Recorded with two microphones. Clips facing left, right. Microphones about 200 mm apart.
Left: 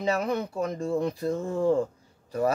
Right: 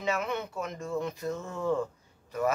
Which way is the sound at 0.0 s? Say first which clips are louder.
Left 5 dB; 35° left (ahead or behind).